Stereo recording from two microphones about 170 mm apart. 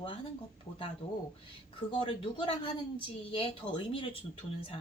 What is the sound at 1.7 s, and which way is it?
Speech, 30° left (ahead or behind).